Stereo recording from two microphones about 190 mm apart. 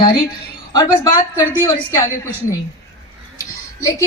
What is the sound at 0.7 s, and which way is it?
A woman's voice, 20° left (ahead or behind).